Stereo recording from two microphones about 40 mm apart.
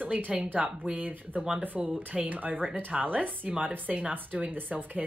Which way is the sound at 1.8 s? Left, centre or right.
Right.